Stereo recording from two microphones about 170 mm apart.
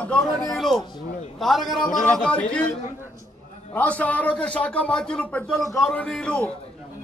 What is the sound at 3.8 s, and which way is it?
A man's voice, 10° left (ahead or behind).